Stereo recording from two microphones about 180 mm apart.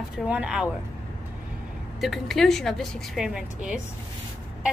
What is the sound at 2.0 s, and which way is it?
A woman's voice, centre (ahead or behind).